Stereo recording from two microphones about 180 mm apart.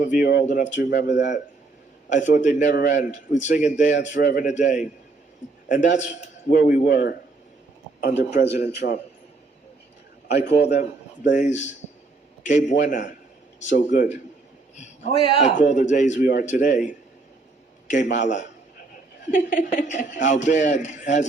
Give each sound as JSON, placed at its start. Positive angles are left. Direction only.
{"t": 0.1, "sound": "speech", "side_deg": 55}
{"t": 0.4, "sound": "a man's voice", "side_deg": 45}
{"t": 0.8, "sound": "speech", "side_deg": 65}
{"t": 1.0, "sound": "a man's voice", "side_deg": 45}
{"t": 8.4, "sound": "a man's voice", "side_deg": 65}
{"t": 10.2, "sound": "a man's voice", "side_deg": 70}
{"t": 10.8, "sound": "a man's voice", "side_deg": 40}